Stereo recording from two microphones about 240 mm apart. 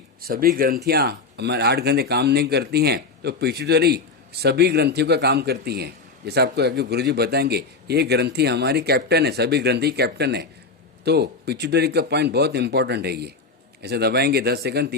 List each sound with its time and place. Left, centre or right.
0.2 s speech: right